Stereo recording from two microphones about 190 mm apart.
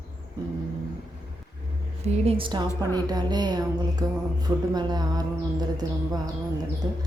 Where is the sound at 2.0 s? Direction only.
30° right (ahead or behind).